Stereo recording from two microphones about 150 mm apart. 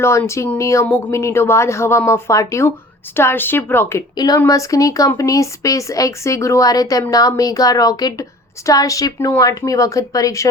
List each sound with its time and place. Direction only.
0.0 s a woman's voice: 20° left (ahead or behind)